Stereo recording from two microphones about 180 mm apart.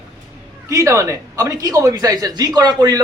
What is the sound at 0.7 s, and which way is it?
Speech, 15° right (ahead or behind).